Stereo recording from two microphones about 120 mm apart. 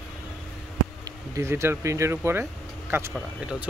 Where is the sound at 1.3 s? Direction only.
20° right (ahead or behind).